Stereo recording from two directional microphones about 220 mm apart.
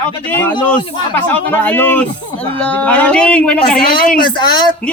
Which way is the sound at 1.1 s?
10° left (ahead or behind).